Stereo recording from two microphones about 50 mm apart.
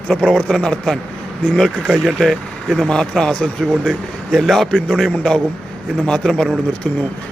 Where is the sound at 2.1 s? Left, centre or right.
Centre.